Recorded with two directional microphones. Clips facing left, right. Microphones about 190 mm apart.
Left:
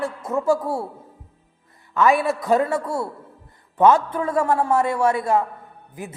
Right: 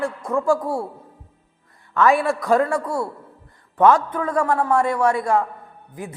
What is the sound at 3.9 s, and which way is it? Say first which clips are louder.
A man's voice: left 1 dB; 25° left (ahead or behind).